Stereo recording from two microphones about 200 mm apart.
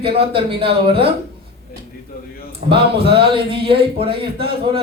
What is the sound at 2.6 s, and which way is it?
Speech, 25° right (ahead or behind).